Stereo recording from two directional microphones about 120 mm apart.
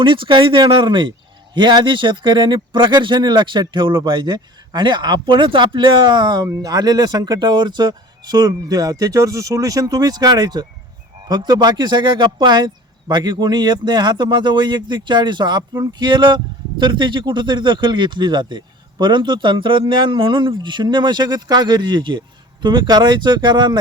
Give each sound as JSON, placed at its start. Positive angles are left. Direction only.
{"t": 0.0, "sound": "speech", "side_deg": -45}